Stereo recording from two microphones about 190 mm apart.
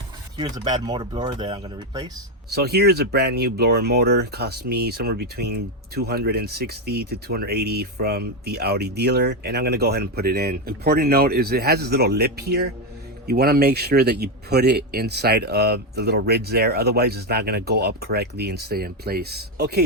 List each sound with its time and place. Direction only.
0.3 s speech: 25° right (ahead or behind)
2.5 s speech: 55° right (ahead or behind)